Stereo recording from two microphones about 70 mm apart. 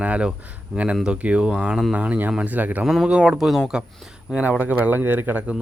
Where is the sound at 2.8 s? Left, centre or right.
Centre.